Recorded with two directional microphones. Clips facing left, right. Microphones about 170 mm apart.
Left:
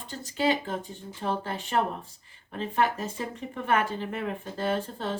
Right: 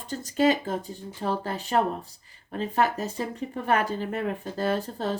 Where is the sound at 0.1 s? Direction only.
45° right (ahead or behind).